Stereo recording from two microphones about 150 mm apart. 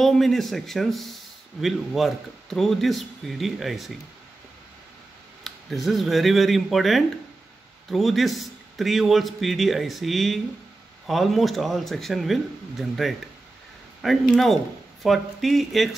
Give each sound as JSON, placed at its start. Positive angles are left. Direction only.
{"t": 0.0, "sound": "a man's voice", "side_deg": 0}
{"t": 5.4, "sound": "a man's voice", "side_deg": 0}
{"t": 14.3, "sound": "a man's voice", "side_deg": 0}